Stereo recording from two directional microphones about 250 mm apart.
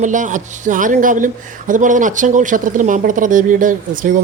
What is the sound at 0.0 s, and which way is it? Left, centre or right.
Speech, right.